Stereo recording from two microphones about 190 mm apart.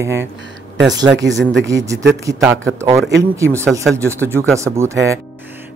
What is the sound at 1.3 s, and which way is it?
Speech, 75° right (ahead or behind).